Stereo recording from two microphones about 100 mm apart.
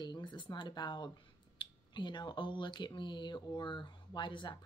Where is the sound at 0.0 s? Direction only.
50° left (ahead or behind).